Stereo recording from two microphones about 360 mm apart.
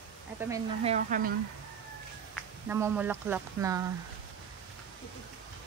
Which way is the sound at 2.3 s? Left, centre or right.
Centre.